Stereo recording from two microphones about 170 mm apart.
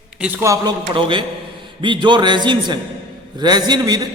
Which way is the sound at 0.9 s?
30° right (ahead or behind).